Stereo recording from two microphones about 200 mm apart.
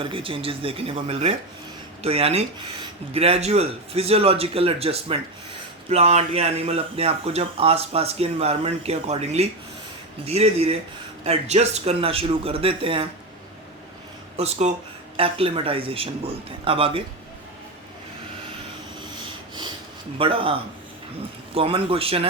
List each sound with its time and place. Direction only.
0.0 s a man's voice: 25° right (ahead or behind)
14.3 s a man's voice: 30° right (ahead or behind)
20.1 s a man's voice: 25° right (ahead or behind)